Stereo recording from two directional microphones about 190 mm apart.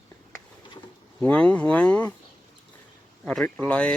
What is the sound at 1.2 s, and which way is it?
Speech, 5° left (ahead or behind).